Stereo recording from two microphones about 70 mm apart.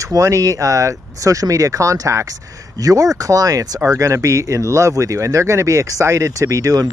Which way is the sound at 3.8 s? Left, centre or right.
Right.